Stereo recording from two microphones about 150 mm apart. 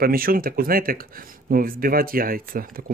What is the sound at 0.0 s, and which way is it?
Speech, 75° right (ahead or behind).